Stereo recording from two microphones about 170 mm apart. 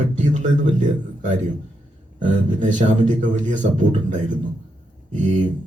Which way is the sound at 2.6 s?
45° right (ahead or behind).